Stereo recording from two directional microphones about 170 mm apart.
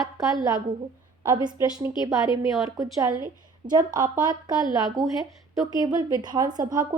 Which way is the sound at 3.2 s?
25° right (ahead or behind).